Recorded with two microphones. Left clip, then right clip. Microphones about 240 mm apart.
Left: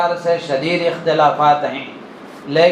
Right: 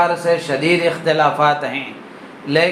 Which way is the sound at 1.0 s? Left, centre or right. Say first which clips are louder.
Left 3 dB; right.